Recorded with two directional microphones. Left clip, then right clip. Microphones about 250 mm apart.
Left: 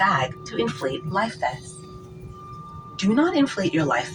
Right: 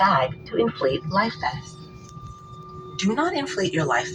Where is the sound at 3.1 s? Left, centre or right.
Left.